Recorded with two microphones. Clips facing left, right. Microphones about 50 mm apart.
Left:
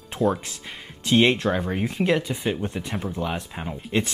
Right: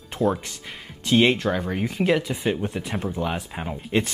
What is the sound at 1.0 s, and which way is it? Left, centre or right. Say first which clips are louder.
Speech: even; centre.